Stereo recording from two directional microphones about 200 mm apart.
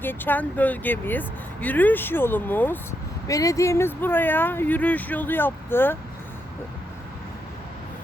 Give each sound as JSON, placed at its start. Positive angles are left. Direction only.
{"t": 0.0, "sound": "speech", "side_deg": 10}